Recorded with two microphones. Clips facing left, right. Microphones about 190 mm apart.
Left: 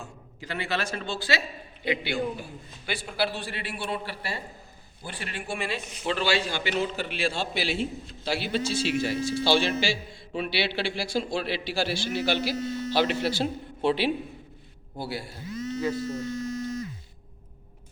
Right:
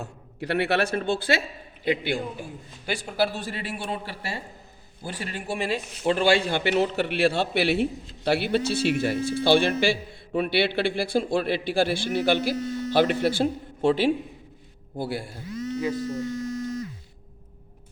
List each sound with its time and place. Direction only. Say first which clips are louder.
0.0 s a man's voice: right 7 dB; 65° right (ahead or behind)
15.5 s a sound: right 2 dB; 20° left (ahead or behind)
16.0 s speech: right 2 dB; 25° left (ahead or behind)